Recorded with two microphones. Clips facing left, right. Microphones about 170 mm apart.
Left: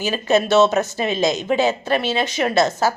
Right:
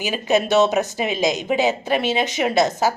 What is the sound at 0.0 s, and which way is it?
A woman's voice, 15° right (ahead or behind).